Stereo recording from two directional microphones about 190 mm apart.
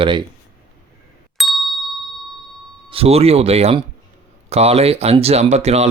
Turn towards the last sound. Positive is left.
turn(degrees=-35)  # may be behind; listen again after turning